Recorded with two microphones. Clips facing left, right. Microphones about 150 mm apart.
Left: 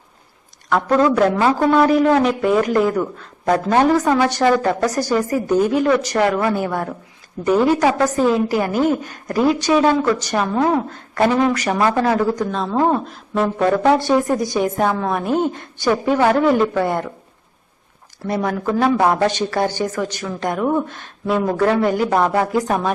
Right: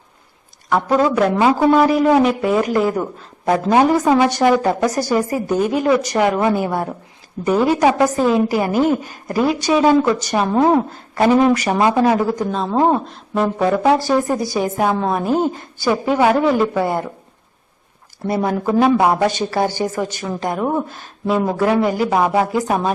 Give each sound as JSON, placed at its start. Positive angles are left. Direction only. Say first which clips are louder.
{"t": 0.7, "sound": "a woman's voice", "louder": "even", "side_deg": -10}
{"t": 10.4, "sound": "speech", "louder": "right 4 dB", "side_deg": -30}
{"t": 11.1, "sound": "a woman's voice", "louder": "right 3 dB", "side_deg": -5}
{"t": 12.7, "sound": "speech", "louder": "right 2 dB", "side_deg": -20}
{"t": 13.1, "sound": "a woman's voice", "louder": "right 1 dB", "side_deg": 0}
{"t": 18.2, "sound": "speech", "louder": "right 2 dB", "side_deg": -35}
{"t": 18.6, "sound": "a woman's voice", "louder": "right 2 dB", "side_deg": -10}
{"t": 20.8, "sound": "speech", "louder": "right 1 dB", "side_deg": 0}
{"t": 21.4, "sound": "a woman's voice", "louder": "left 1 dB", "side_deg": -10}